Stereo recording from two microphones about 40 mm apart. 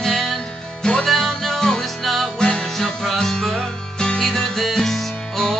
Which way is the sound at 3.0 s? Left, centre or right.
Centre.